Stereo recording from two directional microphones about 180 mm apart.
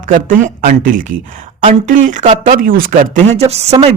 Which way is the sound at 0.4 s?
45° right (ahead or behind).